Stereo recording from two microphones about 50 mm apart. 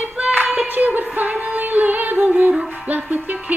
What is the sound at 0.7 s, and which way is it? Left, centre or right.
Music, right.